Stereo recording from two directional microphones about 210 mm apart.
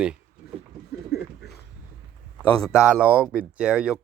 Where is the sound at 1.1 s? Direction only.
50° left (ahead or behind).